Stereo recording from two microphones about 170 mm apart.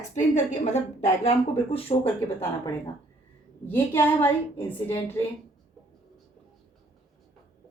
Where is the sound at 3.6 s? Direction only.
10° left (ahead or behind).